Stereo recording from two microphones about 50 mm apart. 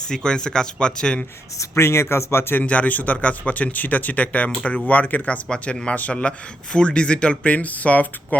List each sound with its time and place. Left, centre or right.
0.1 s speech: centre
1.5 s speech: left
2.6 s speech: left
5.5 s speech: centre